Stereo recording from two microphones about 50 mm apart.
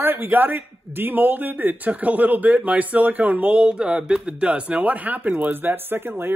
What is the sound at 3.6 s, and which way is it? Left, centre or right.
Speech, centre.